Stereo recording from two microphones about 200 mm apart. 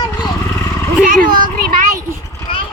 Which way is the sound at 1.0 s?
45° right (ahead or behind).